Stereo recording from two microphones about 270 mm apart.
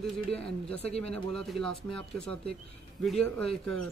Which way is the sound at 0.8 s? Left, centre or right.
Left.